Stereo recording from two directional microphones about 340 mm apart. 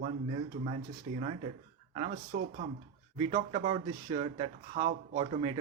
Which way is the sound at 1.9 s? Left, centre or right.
Right.